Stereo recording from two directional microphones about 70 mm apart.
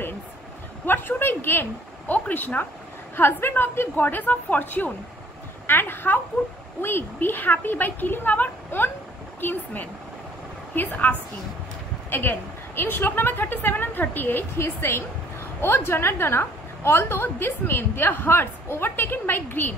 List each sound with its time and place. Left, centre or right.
0.8 s a woman's voice: left